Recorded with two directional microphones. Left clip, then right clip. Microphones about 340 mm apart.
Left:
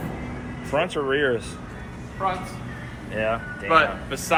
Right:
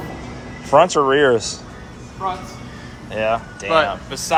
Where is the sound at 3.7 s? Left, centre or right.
Right.